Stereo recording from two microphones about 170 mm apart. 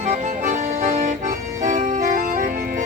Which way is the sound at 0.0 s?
45° right (ahead or behind).